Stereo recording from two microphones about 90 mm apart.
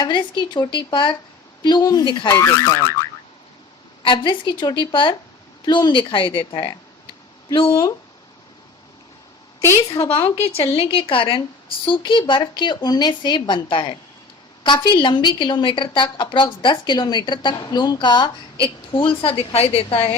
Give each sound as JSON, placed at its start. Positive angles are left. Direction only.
{"t": 0.0, "sound": "speech", "side_deg": 60}
{"t": 1.6, "sound": "a woman's voice", "side_deg": 50}
{"t": 2.3, "sound": "speech", "side_deg": 35}
{"t": 4.0, "sound": "speech", "side_deg": 60}
{"t": 5.6, "sound": "a woman's voice", "side_deg": 50}
{"t": 6.1, "sound": "speech", "side_deg": 65}
{"t": 7.5, "sound": "speech", "side_deg": 75}
{"t": 9.7, "sound": "speech", "side_deg": 40}
{"t": 10.1, "sound": "a woman's voice", "side_deg": 90}
{"t": 17.7, "sound": "a woman's voice", "side_deg": 45}
{"t": 18.6, "sound": "a woman's voice", "side_deg": 75}